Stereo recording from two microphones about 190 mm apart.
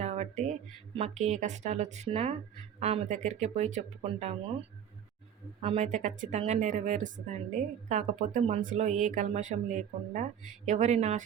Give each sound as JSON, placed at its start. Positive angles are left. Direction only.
{"t": 0.0, "sound": "a sound", "side_deg": -35}
{"t": 0.9, "sound": "speech", "side_deg": -35}
{"t": 5.6, "sound": "speech", "side_deg": -35}